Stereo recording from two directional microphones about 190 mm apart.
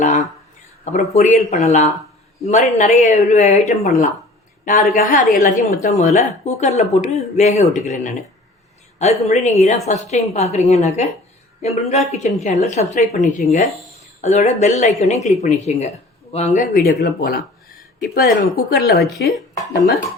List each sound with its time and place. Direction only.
1.1 s a woman's voice: 40° left (ahead or behind)